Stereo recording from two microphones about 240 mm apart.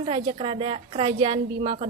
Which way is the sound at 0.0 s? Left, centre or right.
Right.